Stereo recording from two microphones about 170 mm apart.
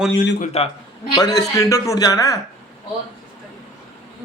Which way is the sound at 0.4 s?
35° left (ahead or behind).